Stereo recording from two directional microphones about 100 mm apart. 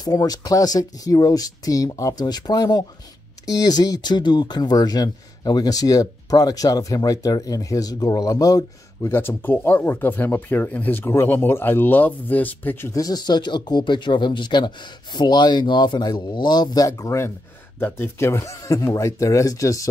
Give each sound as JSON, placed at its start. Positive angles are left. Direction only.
{"t": 0.0, "sound": "speech", "side_deg": 35}
{"t": 9.1, "sound": "speech", "side_deg": 20}
{"t": 12.9, "sound": "speech", "side_deg": 40}
{"t": 17.7, "sound": "speech", "side_deg": 20}